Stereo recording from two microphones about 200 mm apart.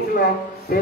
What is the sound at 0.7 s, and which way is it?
Music, 45° left (ahead or behind).